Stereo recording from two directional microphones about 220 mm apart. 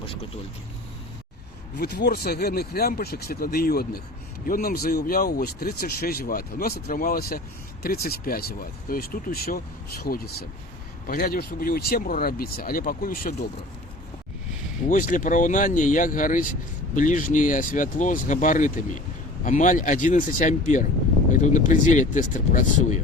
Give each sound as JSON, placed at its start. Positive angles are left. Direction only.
{"t": 1.8, "sound": "speech", "side_deg": 45}
{"t": 14.8, "sound": "speech", "side_deg": 35}